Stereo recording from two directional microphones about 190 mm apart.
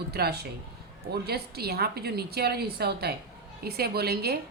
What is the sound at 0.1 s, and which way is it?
A woman's voice, 55° right (ahead or behind).